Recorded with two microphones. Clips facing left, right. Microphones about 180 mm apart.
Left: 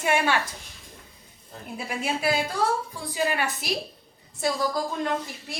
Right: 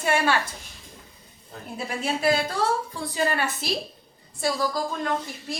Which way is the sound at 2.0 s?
15° left (ahead or behind).